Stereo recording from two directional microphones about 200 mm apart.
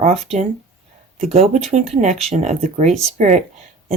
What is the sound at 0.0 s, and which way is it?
Speech, 30° right (ahead or behind).